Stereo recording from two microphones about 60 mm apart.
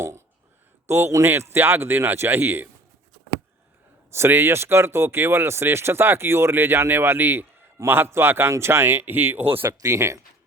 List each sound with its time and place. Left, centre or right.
0.9 s speech: right
4.1 s speech: right
9.8 s speech: right